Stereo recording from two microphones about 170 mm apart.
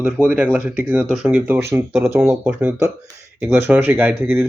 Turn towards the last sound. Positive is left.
turn(degrees=-15)  # may be behind; listen again after turning